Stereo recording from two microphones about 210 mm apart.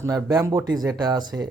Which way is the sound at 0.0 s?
15° right (ahead or behind).